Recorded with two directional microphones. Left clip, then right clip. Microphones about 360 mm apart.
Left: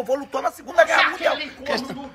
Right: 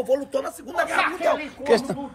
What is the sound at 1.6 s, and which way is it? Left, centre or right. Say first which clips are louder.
Speech: right 6 dB; right.